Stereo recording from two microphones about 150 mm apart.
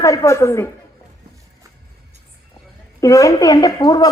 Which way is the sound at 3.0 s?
20° left (ahead or behind).